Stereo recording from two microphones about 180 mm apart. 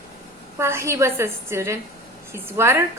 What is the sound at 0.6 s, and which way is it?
A woman's voice, 15° right (ahead or behind).